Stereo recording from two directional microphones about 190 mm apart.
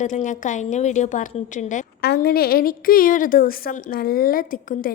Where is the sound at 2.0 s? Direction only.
55° left (ahead or behind).